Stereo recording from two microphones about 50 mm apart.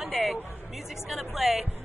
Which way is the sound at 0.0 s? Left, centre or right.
Centre.